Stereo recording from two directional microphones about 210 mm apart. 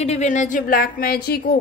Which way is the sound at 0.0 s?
30° left (ahead or behind).